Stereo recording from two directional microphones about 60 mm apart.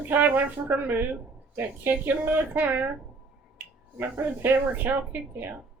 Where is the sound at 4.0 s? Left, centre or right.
Right.